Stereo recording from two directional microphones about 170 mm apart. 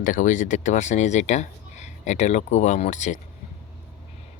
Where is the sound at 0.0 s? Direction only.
50° left (ahead or behind).